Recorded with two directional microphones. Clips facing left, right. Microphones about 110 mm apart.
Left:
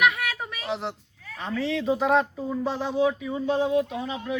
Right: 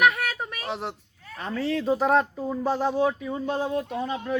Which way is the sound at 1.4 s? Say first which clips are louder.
Even; 40° right (ahead or behind).